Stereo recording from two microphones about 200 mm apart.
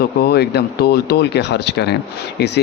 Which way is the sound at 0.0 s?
55° left (ahead or behind).